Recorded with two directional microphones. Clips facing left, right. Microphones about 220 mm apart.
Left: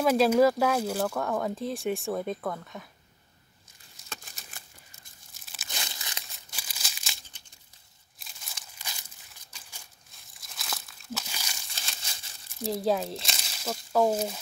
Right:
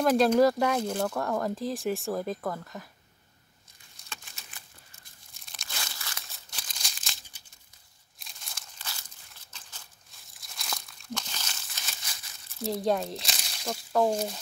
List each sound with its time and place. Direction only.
0.0 s speech: 5° left (ahead or behind)
4.1 s a sound: 40° left (ahead or behind)
5.4 s tearing: 5° left (ahead or behind)
5.7 s crumpling: 20° left (ahead or behind)
6.5 s crumpling: 10° left (ahead or behind)
8.2 s a sound: centre (ahead or behind)
10.3 s crumpling: centre (ahead or behind)
11.7 s crumpling: 30° left (ahead or behind)
12.6 s speech: centre (ahead or behind)